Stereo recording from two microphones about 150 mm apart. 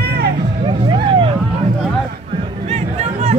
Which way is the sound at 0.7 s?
30° right (ahead or behind).